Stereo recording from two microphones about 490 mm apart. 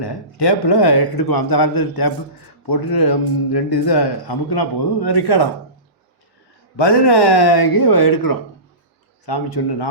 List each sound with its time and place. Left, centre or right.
0.0 s a man's voice: left
6.7 s a man's voice: left